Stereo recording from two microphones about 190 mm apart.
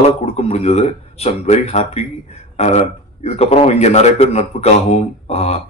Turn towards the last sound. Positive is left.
turn(degrees=35)  # may be behind; listen again after turning